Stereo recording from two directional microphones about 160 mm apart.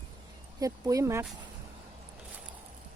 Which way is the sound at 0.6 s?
20° right (ahead or behind).